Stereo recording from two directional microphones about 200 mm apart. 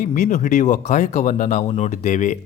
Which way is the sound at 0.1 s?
40° left (ahead or behind).